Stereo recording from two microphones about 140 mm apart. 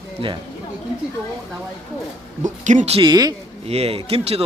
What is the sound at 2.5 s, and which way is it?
Speech, 60° right (ahead or behind).